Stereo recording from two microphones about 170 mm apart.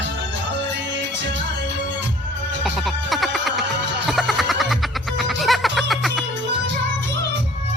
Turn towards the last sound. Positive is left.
turn(degrees=0)  # may be behind; listen again after turning